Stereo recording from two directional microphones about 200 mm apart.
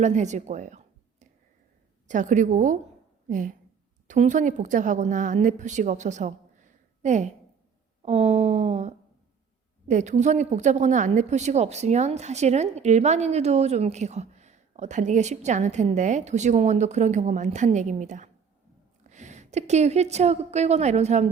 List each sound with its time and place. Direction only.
0.0 s a woman's voice: 35° right (ahead or behind)
2.0 s a woman's voice: 40° right (ahead or behind)